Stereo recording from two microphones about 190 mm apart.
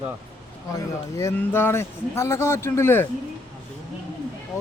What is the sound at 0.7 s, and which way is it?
Speech, 15° left (ahead or behind).